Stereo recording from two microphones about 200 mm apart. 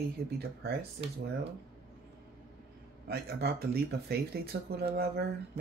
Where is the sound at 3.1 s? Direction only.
50° right (ahead or behind).